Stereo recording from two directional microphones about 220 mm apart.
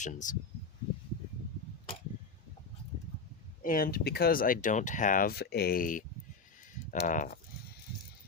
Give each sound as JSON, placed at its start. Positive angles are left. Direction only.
{"t": 0.0, "sound": "speech", "side_deg": 35}
{"t": 3.6, "sound": "speech", "side_deg": 40}